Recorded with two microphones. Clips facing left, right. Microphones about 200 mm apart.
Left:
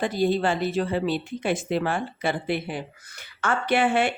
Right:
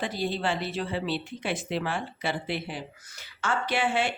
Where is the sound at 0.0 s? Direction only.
45° left (ahead or behind).